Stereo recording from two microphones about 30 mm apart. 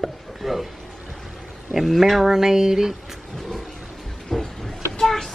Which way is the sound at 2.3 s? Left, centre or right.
Centre.